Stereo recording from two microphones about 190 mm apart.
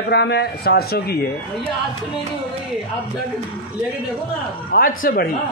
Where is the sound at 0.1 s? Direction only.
60° left (ahead or behind).